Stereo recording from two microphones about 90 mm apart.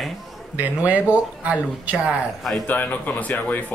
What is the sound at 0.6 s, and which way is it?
Speech, 15° right (ahead or behind).